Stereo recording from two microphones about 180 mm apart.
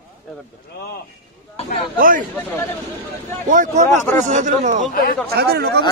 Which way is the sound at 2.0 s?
50° right (ahead or behind).